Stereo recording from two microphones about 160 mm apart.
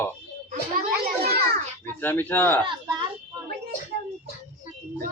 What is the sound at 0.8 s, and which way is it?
Children playing, 80° right.